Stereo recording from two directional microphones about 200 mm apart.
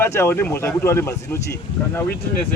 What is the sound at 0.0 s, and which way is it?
Speech, 10° left (ahead or behind).